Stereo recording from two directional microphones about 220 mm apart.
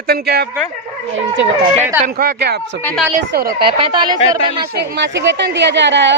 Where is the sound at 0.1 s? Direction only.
45° right (ahead or behind).